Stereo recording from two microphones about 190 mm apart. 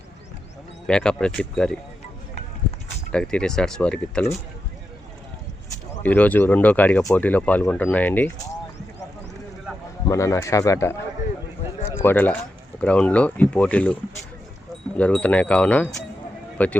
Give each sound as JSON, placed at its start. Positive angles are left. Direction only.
{"t": 0.9, "sound": "speech", "side_deg": 5}
{"t": 3.1, "sound": "speech", "side_deg": 5}
{"t": 6.0, "sound": "speech", "side_deg": 10}
{"t": 10.1, "sound": "speech", "side_deg": 15}
{"t": 12.0, "sound": "speech", "side_deg": 10}